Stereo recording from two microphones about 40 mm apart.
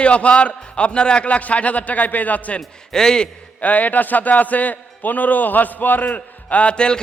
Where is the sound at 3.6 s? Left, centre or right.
Left.